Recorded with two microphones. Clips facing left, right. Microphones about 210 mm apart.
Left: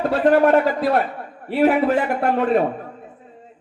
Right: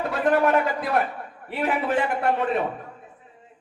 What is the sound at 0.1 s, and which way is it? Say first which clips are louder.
A man's voice: left 5 dB; 35° left (ahead or behind).